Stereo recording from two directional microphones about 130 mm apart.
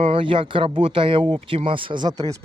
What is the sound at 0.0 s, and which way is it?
Speech, 45° right (ahead or behind).